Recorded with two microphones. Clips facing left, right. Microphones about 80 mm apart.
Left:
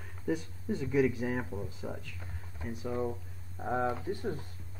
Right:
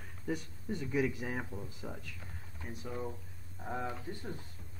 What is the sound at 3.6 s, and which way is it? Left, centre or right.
Speech, left.